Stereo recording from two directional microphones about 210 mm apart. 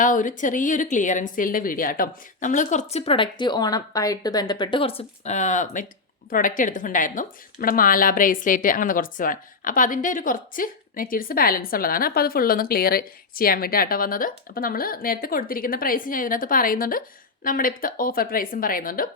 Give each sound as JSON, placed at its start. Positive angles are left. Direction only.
{"t": 0.0, "sound": "a woman's voice", "side_deg": 40}